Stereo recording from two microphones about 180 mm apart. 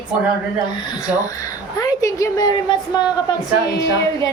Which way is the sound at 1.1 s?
20° left (ahead or behind).